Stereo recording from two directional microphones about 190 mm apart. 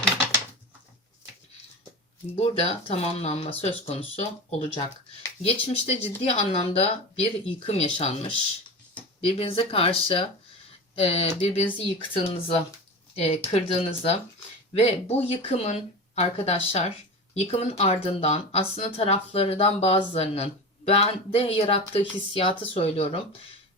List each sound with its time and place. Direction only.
2.3 s speech: 30° left (ahead or behind)